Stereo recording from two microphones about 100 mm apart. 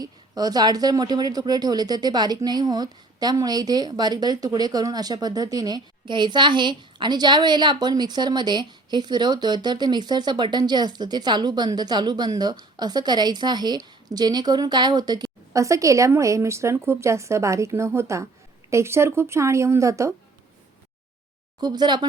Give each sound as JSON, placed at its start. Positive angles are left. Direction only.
{"t": 0.0, "sound": "a woman's voice", "side_deg": -40}
{"t": 21.6, "sound": "speech", "side_deg": -45}